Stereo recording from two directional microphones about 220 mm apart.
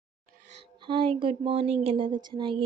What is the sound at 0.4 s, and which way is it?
A woman's voice, 25° right (ahead or behind).